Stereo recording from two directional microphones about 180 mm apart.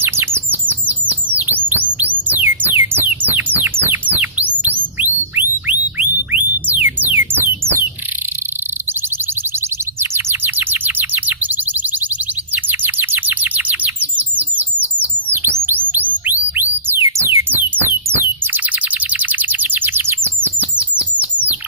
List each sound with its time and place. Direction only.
0.0 s chirp: 10° right (ahead or behind)
1.4 s a sound: 10° right (ahead or behind)
2.0 s music: 10° right (ahead or behind)
4.9 s a sound: 10° right (ahead or behind)
6.0 s music: 10° right (ahead or behind)
10.0 s bird: 15° right (ahead or behind)
15.3 s music: 15° right (ahead or behind)